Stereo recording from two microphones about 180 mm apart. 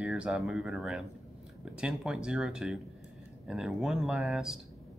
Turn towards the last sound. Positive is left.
turn(degrees=0)  # may be behind; listen again after turning